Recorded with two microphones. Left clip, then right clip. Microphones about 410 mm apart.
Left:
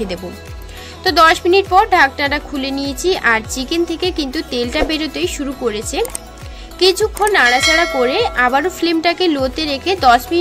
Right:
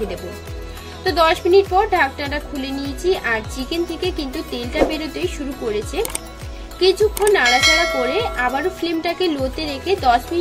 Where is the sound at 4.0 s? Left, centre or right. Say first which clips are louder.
Left 5 dB; left.